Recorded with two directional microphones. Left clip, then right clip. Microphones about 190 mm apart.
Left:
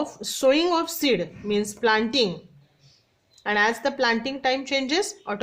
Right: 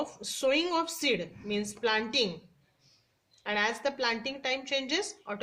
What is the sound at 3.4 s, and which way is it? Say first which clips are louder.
A woman's voice: left 8 dB; 35° left (ahead or behind).